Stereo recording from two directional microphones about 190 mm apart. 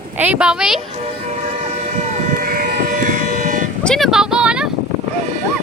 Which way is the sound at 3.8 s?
5° left (ahead or behind).